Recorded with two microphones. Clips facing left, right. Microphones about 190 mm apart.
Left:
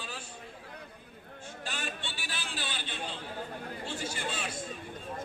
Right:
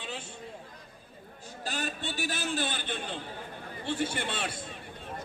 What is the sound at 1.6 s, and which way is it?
A man's voice, 40° right (ahead or behind).